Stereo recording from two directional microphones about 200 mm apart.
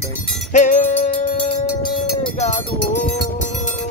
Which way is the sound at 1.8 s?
25° left (ahead or behind).